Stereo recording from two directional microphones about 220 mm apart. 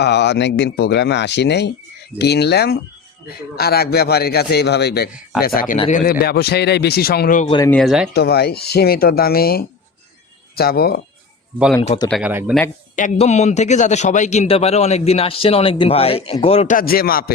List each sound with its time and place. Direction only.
0.0 s speech: 50° left (ahead or behind)
5.7 s a man's voice: 25° left (ahead or behind)
6.1 s speech: 45° left (ahead or behind)
7.7 s speech: centre (ahead or behind)
8.1 s speech: 50° left (ahead or behind)
11.8 s a man's voice: 20° left (ahead or behind)
12.0 s speech: centre (ahead or behind)
12.3 s speech: 10° right (ahead or behind)
13.0 s a man's voice: 30° left (ahead or behind)